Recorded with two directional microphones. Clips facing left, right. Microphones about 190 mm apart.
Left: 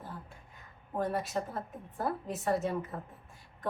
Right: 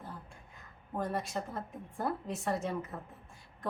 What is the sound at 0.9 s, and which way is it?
A woman's voice, centre (ahead or behind).